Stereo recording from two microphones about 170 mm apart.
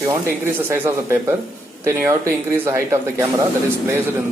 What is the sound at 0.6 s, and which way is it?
A man's voice, 15° right (ahead or behind).